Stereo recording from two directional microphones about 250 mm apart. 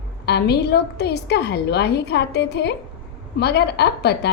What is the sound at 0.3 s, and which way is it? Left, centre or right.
A woman's voice, left.